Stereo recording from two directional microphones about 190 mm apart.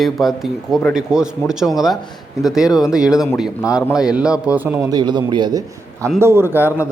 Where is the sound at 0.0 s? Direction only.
Centre (ahead or behind).